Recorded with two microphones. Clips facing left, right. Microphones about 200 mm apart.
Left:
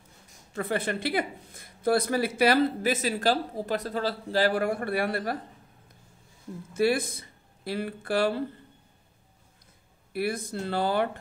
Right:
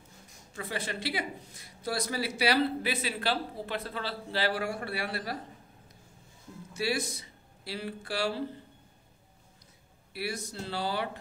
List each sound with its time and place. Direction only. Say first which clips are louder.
0.6 s speech: left 7 dB; 55° left (ahead or behind)
6.7 s speech: left 7 dB; 55° left (ahead or behind)
10.1 s speech: left 7 dB; 55° left (ahead or behind)